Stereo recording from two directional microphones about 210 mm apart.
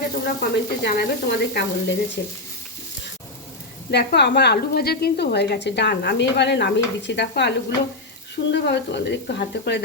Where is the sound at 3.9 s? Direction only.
50° left (ahead or behind).